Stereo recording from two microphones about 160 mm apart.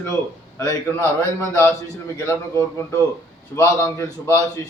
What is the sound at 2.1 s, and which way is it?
A man's voice, 15° left (ahead or behind).